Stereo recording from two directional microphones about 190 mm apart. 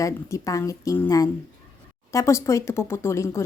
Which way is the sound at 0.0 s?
15° left (ahead or behind).